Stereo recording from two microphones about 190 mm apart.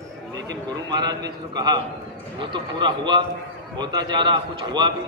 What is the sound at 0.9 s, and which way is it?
A man's voice, 20° right (ahead or behind).